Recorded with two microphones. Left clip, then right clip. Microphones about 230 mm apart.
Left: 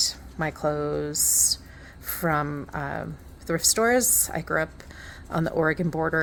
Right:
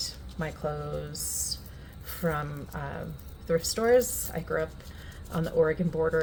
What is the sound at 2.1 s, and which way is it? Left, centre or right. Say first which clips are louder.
Speech: left 6 dB; left.